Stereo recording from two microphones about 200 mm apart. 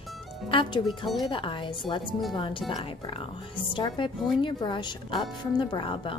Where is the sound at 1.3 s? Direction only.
25° left (ahead or behind).